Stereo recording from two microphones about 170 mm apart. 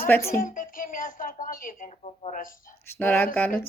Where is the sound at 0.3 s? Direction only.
55° left (ahead or behind).